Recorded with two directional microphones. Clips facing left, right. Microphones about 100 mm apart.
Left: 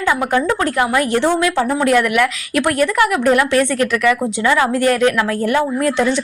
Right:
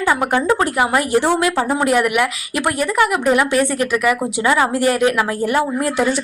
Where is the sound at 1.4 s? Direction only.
20° right (ahead or behind).